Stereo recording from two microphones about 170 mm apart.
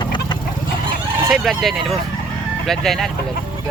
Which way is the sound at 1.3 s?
Centre (ahead or behind).